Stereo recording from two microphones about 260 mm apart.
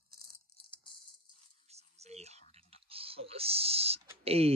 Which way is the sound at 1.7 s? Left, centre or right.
Right.